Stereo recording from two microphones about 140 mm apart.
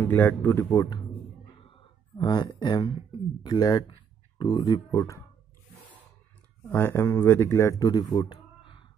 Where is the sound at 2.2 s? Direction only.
30° left (ahead or behind).